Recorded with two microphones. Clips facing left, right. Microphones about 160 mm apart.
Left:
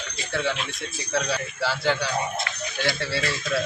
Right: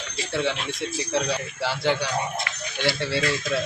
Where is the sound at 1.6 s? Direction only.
20° right (ahead or behind).